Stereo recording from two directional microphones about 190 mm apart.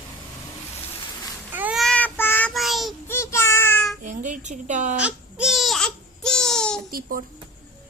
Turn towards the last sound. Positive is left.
turn(degrees=-50)  # may be behind; listen again after turning